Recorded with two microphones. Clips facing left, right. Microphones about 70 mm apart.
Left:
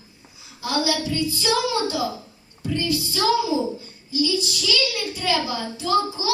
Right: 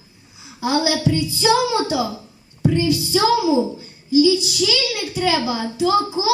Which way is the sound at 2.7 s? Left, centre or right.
Centre.